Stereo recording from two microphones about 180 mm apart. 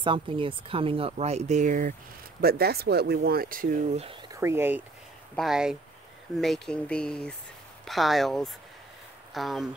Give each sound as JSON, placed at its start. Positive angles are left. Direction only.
{"t": 0.0, "sound": "speech", "side_deg": -30}
{"t": 2.4, "sound": "speech", "side_deg": -60}
{"t": 4.3, "sound": "speech", "side_deg": -15}
{"t": 5.3, "sound": "speech", "side_deg": 0}